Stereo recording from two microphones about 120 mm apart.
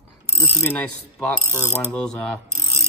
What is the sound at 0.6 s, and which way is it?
Cutlery, 10° left (ahead or behind).